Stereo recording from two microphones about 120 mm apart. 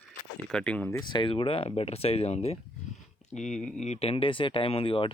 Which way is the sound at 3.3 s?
80° left.